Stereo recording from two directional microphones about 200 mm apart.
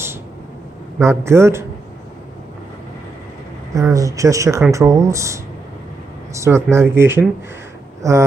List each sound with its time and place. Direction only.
0.9 s speech: 15° right (ahead or behind)
3.7 s speech: 15° right (ahead or behind)